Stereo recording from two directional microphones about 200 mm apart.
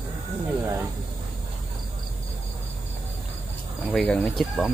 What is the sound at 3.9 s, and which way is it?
Speech, 5° left (ahead or behind).